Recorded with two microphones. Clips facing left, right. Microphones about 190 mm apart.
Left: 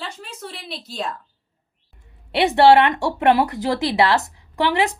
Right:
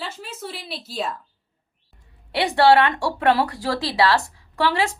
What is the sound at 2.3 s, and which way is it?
Speech, 25° left (ahead or behind).